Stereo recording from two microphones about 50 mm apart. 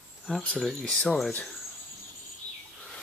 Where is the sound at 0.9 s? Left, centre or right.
Centre.